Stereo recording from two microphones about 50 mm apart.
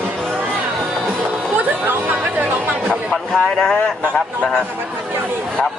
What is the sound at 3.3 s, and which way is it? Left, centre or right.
Speech, centre.